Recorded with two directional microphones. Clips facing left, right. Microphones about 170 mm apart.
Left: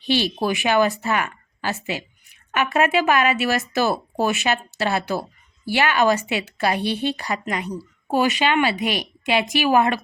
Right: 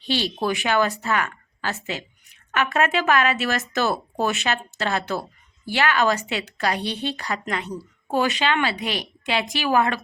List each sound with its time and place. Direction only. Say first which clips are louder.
0.4 s speech: left 2 dB; 15° left (ahead or behind)
7.4 s a woman's voice: left 2 dB; 5° left (ahead or behind)
8.0 s speech: left 2 dB; 15° left (ahead or behind)